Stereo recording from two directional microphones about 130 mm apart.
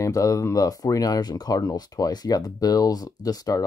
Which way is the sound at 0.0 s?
25° left (ahead or behind).